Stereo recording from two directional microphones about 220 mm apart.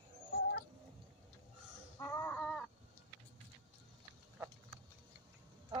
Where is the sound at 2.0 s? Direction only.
10° left (ahead or behind).